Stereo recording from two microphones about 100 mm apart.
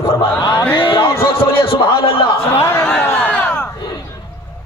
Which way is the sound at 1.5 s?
65° left (ahead or behind).